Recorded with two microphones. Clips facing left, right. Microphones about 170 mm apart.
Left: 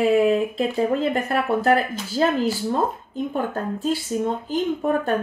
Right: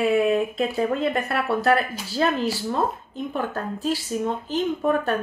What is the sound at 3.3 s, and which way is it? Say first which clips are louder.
Speech: left 1 dB; 20° left (ahead or behind).